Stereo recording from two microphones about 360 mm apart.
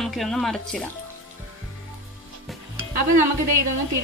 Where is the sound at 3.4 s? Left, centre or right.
Right.